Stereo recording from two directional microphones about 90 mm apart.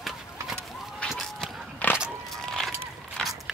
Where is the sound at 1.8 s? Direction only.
15° left (ahead or behind).